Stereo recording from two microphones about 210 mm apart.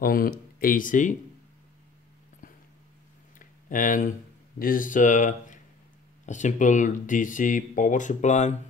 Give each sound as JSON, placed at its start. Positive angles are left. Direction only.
{"t": 0.0, "sound": "speech", "side_deg": 45}
{"t": 3.3, "sound": "a sound", "side_deg": 40}
{"t": 4.6, "sound": "speech", "side_deg": 40}